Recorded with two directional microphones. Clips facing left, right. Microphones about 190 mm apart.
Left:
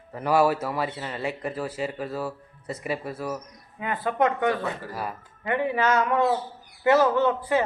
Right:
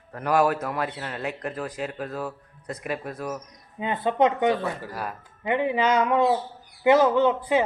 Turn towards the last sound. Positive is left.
turn(degrees=-15)  # may be behind; listen again after turning